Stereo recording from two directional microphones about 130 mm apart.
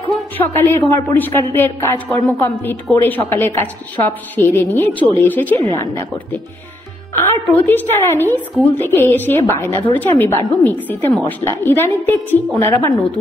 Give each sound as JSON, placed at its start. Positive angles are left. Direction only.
{"t": 0.6, "sound": "a woman's voice", "side_deg": 15}
{"t": 7.2, "sound": "a woman's voice", "side_deg": 15}